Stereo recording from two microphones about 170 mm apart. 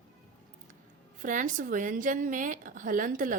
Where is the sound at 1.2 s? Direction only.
50° right (ahead or behind).